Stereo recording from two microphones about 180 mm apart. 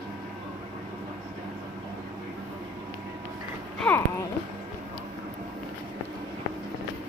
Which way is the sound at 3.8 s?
10° left (ahead or behind).